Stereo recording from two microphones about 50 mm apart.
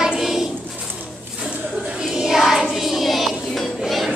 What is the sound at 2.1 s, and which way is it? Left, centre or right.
Child singing, centre.